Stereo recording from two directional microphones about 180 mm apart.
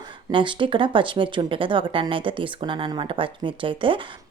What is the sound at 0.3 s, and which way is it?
Speech, 25° right (ahead or behind).